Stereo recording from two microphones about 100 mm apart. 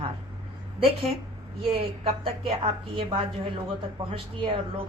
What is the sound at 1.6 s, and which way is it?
Speech, 70° right (ahead or behind).